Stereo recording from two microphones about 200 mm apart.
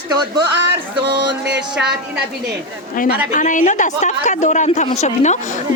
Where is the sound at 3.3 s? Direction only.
40° left (ahead or behind).